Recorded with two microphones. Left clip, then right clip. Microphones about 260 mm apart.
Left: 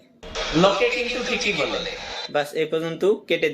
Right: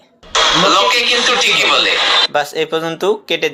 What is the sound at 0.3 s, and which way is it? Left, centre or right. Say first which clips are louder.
Speech: right 9 dB; right.